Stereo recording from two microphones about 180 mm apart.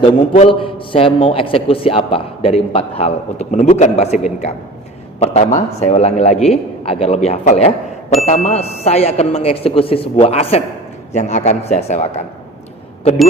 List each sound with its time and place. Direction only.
0.0 s a man's voice: 30° left (ahead or behind)
5.2 s a man's voice: 40° left (ahead or behind)